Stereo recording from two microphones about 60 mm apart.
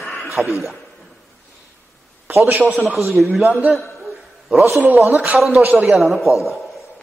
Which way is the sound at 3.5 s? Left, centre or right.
Right.